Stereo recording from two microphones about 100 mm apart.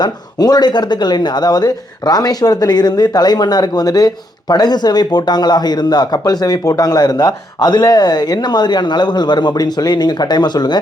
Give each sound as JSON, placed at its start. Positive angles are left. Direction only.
{"t": 0.0, "sound": "speech", "side_deg": 40}